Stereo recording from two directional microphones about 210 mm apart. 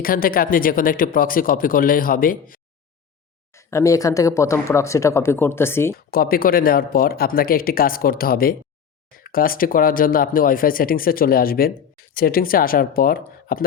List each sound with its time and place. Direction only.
0.0 s speech: 45° left (ahead or behind)
3.5 s speech: 15° left (ahead or behind)
6.1 s speech: 45° left (ahead or behind)